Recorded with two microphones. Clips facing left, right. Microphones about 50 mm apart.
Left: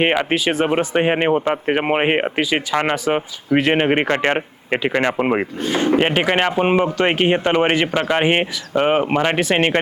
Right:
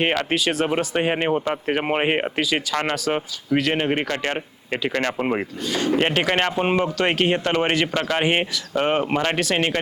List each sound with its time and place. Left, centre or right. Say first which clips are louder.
0.0 s speech: left 4 dB; centre
3.6 s speech: left 7 dB; left
6.0 s speech: left 3 dB; centre